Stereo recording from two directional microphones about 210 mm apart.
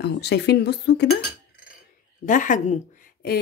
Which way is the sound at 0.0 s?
55° left (ahead or behind).